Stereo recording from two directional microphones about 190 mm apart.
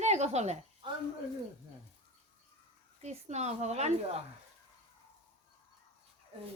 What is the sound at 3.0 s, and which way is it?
Speech, 35° right (ahead or behind).